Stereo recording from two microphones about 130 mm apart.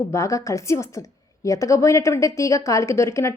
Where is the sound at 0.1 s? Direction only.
25° left (ahead or behind).